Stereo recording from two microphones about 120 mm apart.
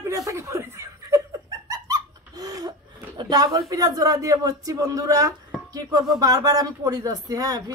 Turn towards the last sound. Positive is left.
turn(degrees=-30)  # may be behind; listen again after turning